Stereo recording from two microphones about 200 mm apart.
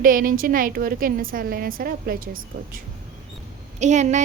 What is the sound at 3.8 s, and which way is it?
Speech, 35° right (ahead or behind).